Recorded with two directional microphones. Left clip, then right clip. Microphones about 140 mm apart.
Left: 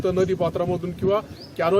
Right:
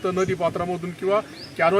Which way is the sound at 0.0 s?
45° left (ahead or behind).